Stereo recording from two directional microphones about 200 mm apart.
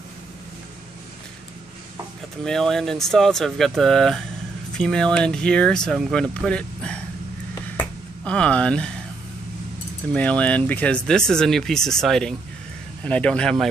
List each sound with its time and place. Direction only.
2.4 s speech: centre (ahead or behind)
7.7 s finger snapping: 5° left (ahead or behind)
10.1 s speech: 5° left (ahead or behind)